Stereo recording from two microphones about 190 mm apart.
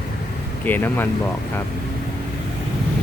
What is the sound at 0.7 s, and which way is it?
Speech, 10° left (ahead or behind).